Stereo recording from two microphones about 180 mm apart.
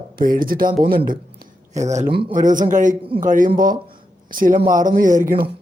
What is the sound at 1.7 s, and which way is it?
Speech, 40° right (ahead or behind).